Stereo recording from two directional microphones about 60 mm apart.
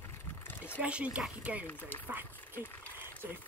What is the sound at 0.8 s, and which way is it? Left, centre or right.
Speech, right.